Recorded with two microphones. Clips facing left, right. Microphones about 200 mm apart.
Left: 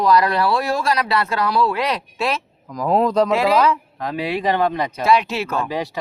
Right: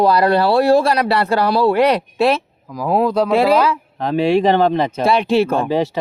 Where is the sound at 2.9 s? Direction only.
10° right (ahead or behind).